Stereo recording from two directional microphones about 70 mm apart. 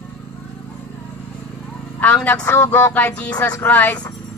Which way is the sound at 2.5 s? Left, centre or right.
Left.